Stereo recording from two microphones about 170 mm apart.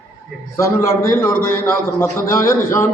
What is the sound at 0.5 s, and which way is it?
A man's voice, 15° left (ahead or behind).